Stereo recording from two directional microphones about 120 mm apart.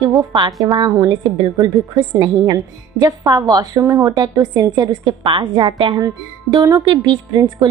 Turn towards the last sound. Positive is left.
turn(degrees=-40)  # may be behind; listen again after turning